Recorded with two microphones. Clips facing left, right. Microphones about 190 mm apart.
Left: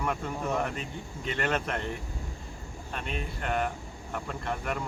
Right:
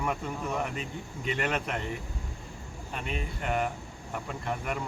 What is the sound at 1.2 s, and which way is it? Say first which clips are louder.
Speech: left 1 dB; 5° right (ahead or behind).